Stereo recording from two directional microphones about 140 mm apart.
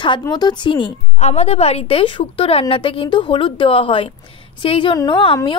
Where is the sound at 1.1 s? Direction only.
50° left (ahead or behind).